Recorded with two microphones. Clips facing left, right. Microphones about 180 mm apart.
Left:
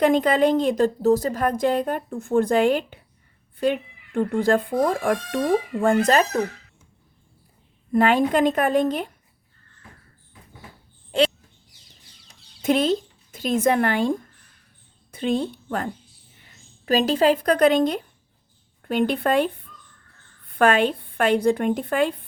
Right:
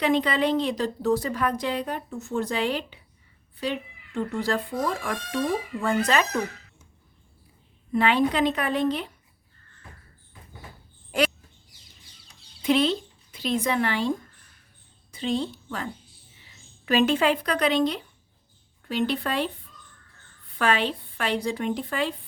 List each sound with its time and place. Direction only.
0.0 s a woman's voice: 45° left (ahead or behind)
7.9 s a woman's voice: 45° left (ahead or behind)
11.1 s a sound: 25° left (ahead or behind)
12.6 s a woman's voice: 45° left (ahead or behind)
20.5 s a woman's voice: 50° left (ahead or behind)